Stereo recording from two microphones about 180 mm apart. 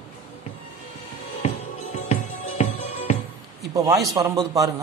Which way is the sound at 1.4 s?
40° left (ahead or behind).